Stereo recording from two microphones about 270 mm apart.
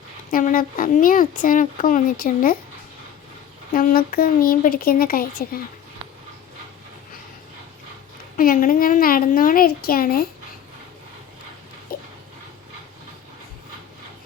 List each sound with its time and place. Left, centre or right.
0.3 s speech: left
3.7 s speech: left
8.4 s speech: left
11.9 s dog: left